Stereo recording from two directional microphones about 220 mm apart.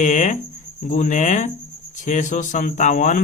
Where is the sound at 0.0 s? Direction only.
35° left (ahead or behind).